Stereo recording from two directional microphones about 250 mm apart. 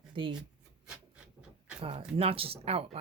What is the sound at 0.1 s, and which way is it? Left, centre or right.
Speech, centre.